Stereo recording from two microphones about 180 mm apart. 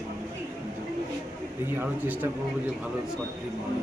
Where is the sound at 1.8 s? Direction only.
10° right (ahead or behind).